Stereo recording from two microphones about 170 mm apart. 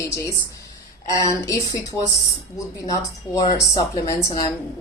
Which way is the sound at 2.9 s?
25° left (ahead or behind).